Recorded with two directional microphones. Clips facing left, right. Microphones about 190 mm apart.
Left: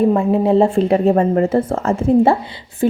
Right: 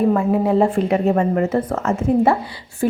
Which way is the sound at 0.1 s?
25° left (ahead or behind).